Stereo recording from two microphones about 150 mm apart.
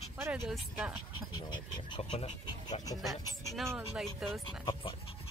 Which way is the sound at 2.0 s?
40° left (ahead or behind).